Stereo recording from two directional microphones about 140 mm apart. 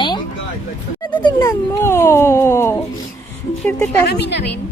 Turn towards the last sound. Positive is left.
turn(degrees=15)  # may be behind; listen again after turning